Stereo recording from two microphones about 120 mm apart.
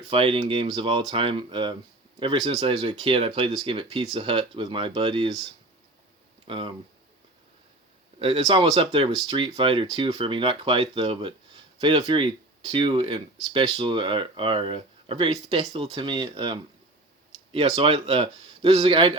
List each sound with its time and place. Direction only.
0.1 s a man's voice: 50° right (ahead or behind)
2.4 s speech: 55° right (ahead or behind)
6.5 s speech: 45° right (ahead or behind)
8.4 s speech: 35° right (ahead or behind)
8.7 s speech: 55° right (ahead or behind)
15.4 s speech: 60° right (ahead or behind)
16.0 s speech: 40° right (ahead or behind)